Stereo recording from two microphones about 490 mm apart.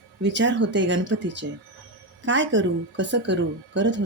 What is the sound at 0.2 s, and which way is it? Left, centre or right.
Speech, right.